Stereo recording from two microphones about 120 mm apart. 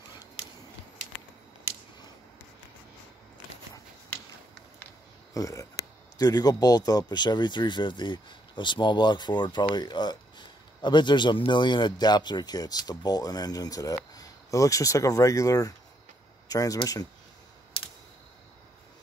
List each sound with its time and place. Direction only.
5.3 s speech: 30° left (ahead or behind)
17.8 s typing: 45° left (ahead or behind)